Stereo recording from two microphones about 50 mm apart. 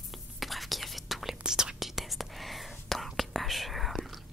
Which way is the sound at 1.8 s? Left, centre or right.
Centre.